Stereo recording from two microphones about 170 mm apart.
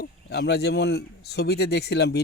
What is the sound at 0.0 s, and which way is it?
Speech, 75° left (ahead or behind).